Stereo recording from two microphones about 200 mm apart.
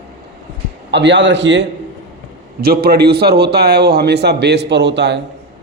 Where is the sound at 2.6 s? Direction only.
50° right (ahead or behind).